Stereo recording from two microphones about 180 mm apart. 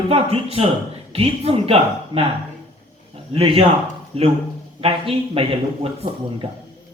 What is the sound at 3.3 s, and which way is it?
Speech, 30° right (ahead or behind).